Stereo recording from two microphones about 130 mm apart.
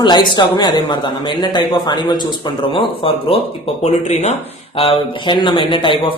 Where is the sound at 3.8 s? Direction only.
60° left (ahead or behind).